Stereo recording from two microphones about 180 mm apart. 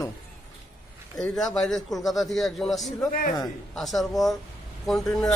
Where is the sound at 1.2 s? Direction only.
5° left (ahead or behind).